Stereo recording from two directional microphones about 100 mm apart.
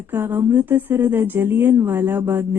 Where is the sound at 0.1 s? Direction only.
20° right (ahead or behind).